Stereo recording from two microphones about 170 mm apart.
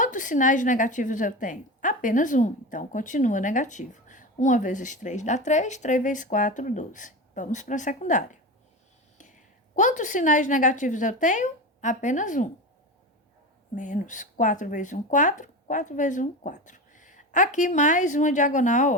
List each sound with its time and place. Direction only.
0.0 s a woman's voice: 50° left (ahead or behind)
13.7 s a woman's voice: 45° left (ahead or behind)